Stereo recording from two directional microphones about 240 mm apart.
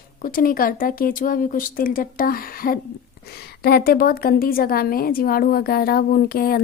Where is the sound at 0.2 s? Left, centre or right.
Left.